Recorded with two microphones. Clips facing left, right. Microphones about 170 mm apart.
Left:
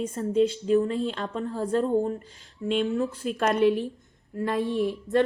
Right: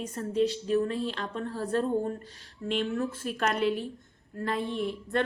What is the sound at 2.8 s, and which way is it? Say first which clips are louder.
Speech: left 4 dB; 20° left (ahead or behind).